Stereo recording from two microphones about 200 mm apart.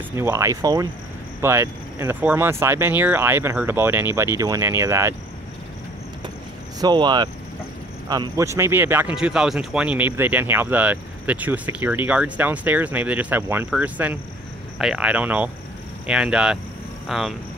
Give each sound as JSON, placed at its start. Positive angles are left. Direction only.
{"t": 0.1, "sound": "speech", "side_deg": -15}
{"t": 6.8, "sound": "speech", "side_deg": -20}